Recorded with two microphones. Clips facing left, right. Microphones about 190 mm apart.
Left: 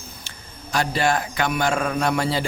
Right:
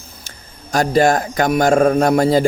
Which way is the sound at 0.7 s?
45° right (ahead or behind).